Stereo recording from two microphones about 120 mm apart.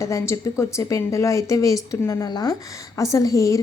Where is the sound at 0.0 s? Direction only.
25° left (ahead or behind).